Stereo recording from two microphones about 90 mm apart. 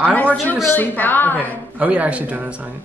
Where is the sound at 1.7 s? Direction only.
15° right (ahead or behind).